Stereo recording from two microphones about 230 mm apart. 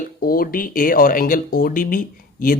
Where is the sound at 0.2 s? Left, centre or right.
Left.